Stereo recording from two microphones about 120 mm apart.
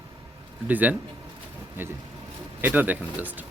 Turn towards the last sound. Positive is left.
turn(degrees=-15)  # may be behind; listen again after turning